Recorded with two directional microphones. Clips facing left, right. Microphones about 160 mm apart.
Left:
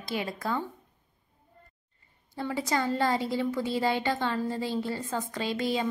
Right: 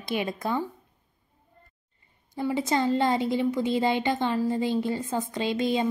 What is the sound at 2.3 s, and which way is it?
A woman's voice, 15° right (ahead or behind).